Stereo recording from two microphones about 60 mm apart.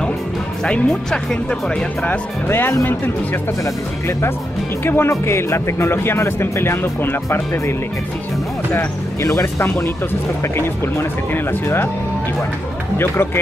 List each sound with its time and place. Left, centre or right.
0.7 s speech: centre
2.0 s speech: left
4.8 s speech: left
9.2 s speech: left
12.9 s speech: left